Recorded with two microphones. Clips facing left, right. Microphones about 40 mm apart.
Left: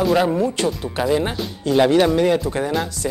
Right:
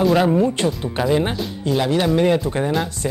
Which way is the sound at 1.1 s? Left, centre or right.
Centre.